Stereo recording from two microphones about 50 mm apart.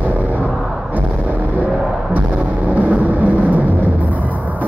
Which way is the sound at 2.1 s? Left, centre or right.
Right.